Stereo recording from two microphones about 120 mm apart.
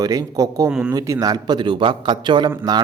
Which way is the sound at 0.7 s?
5° right (ahead or behind).